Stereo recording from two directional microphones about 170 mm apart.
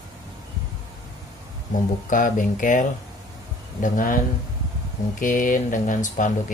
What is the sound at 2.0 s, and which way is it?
Speech, 50° left (ahead or behind).